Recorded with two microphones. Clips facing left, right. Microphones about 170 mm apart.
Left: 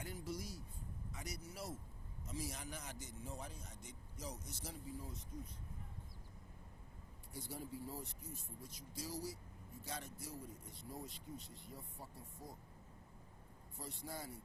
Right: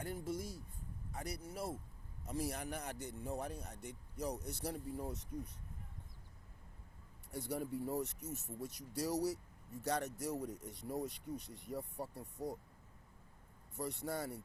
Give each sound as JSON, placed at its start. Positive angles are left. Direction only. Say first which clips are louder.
{"t": 0.0, "sound": "a sound", "louder": "right 5 dB", "side_deg": -55}
{"t": 1.1, "sound": "speech", "louder": "right 7 dB", "side_deg": -55}
{"t": 7.3, "sound": "speech", "louder": "right 8 dB", "side_deg": -70}
{"t": 13.7, "sound": "speech", "louder": "right 8 dB", "side_deg": -70}